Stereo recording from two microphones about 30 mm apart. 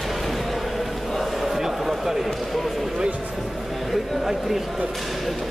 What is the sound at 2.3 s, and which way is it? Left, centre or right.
Basketball bounce, centre.